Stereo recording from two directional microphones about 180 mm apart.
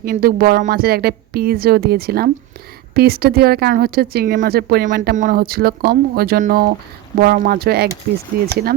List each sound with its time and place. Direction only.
0.0 s speech: 55° right (ahead or behind)